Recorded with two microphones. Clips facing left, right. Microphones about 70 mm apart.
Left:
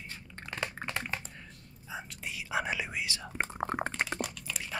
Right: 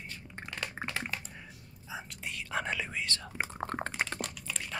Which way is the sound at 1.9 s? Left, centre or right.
Centre.